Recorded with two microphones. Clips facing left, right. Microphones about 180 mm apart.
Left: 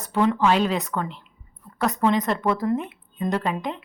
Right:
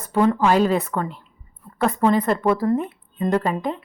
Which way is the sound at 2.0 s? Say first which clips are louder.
Right 3 dB; 5° right (ahead or behind).